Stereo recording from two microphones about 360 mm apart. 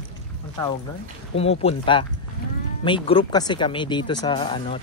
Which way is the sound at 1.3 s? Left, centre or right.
Centre.